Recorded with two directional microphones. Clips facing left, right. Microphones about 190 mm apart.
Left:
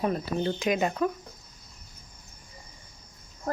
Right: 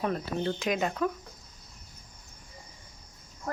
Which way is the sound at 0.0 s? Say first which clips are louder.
Left 2 dB; 10° left (ahead or behind).